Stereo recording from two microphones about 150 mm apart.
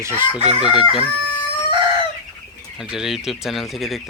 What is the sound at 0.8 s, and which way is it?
Crowing, 35° left (ahead or behind).